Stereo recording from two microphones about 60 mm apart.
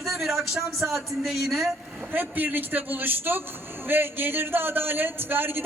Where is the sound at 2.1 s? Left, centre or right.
Right.